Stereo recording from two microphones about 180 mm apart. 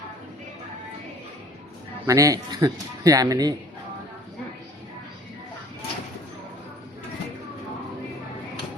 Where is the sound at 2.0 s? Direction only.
20° right (ahead or behind).